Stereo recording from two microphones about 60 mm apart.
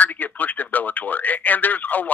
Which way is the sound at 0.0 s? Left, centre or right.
Left.